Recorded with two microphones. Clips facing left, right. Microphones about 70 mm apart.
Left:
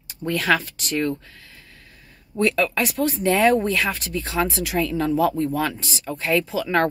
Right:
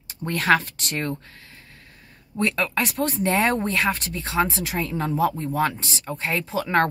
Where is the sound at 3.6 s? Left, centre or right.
Right.